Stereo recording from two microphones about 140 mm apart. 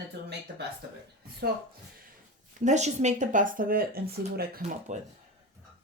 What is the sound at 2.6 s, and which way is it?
Speech, 55° right (ahead or behind).